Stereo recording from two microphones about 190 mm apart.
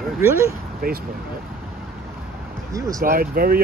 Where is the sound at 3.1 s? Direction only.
50° right (ahead or behind).